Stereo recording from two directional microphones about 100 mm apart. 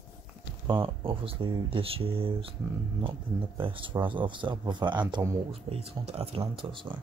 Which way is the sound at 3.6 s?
55° right (ahead or behind).